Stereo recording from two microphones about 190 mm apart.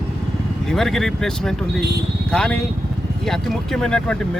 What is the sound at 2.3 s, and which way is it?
Speech, 5° left (ahead or behind).